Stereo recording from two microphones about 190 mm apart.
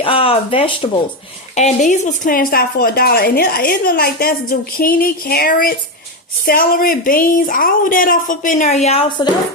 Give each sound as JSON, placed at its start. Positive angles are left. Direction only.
{"t": 0.0, "sound": "a woman's voice", "side_deg": 30}